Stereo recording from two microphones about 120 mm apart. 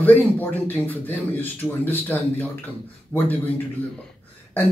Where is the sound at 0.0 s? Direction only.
15° left (ahead or behind).